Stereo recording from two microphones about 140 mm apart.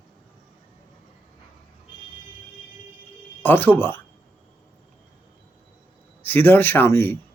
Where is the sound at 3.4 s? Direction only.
15° left (ahead or behind).